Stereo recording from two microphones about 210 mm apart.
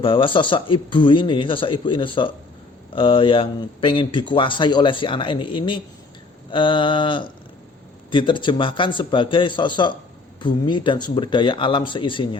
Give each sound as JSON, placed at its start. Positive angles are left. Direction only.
{"t": 0.0, "sound": "speech", "side_deg": 25}